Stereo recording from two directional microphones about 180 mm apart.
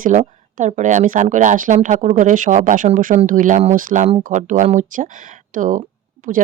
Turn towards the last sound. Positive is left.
turn(degrees=-45)  # may be behind; listen again after turning